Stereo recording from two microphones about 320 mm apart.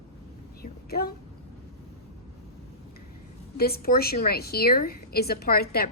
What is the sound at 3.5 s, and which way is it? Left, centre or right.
A woman's voice, left.